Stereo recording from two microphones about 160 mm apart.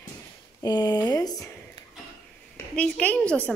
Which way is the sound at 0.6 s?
25° left (ahead or behind).